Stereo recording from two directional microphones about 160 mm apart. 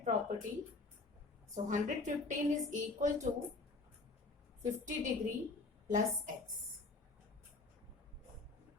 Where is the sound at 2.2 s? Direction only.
50° right (ahead or behind).